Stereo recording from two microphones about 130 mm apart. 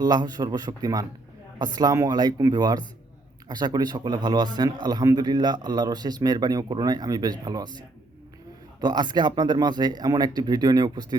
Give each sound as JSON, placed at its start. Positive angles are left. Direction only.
{"t": 0.0, "sound": "speech", "side_deg": -30}
{"t": 8.8, "sound": "speech", "side_deg": -35}